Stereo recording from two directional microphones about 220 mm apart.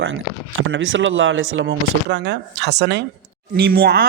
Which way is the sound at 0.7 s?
60° right (ahead or behind).